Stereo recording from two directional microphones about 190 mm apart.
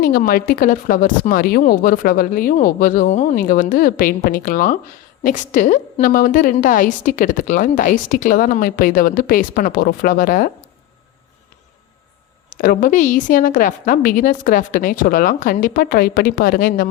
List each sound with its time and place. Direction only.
0.0 s a woman's voice: 50° left (ahead or behind)
12.5 s a woman's voice: 45° left (ahead or behind)